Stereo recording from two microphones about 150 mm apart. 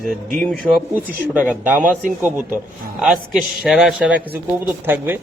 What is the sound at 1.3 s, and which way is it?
Speech, 10° right (ahead or behind).